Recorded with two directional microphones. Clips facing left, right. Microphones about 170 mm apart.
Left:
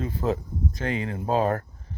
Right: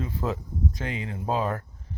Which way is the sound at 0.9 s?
45° left (ahead or behind).